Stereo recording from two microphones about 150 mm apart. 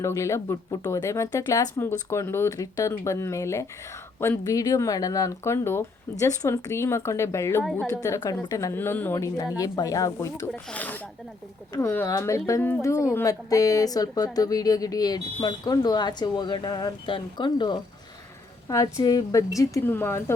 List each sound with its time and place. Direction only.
0.0 s speech: 20° left (ahead or behind)
7.6 s a woman's voice: centre (ahead or behind)
7.9 s speech: 20° left (ahead or behind)
10.5 s speech: 10° left (ahead or behind)
12.0 s speech: 20° left (ahead or behind)